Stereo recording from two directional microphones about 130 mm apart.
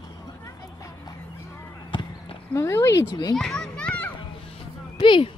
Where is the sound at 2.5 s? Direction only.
20° left (ahead or behind).